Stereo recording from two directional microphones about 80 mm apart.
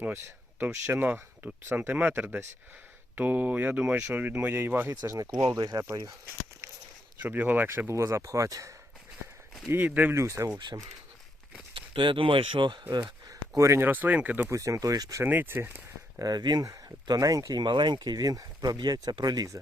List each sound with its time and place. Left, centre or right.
0.7 s speech: right
5.2 s speech: right
7.2 s speech: right
9.6 s speech: right
10.2 s speech: right
11.7 s speech: right
13.6 s speech: right
13.8 s speech: right
14.5 s speech: right
15.2 s speech: right
16.1 s speech: right
17.2 s speech: right
17.6 s speech: right